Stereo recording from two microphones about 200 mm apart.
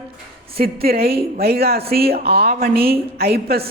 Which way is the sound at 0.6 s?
50° right (ahead or behind).